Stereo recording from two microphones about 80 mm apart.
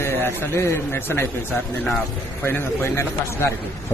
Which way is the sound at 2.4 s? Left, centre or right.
Left.